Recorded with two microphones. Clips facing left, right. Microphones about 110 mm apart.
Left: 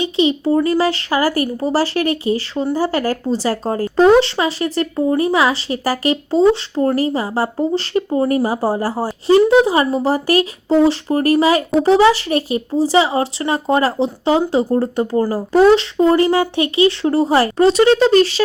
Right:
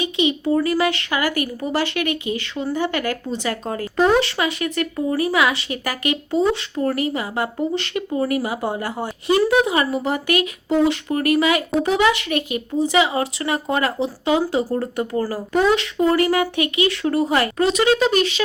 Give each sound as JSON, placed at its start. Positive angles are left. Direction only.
{"t": 0.0, "sound": "speech", "side_deg": 30}